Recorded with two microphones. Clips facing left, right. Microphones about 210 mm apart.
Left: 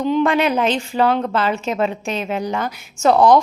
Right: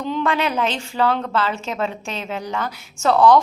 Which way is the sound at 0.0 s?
15° left (ahead or behind).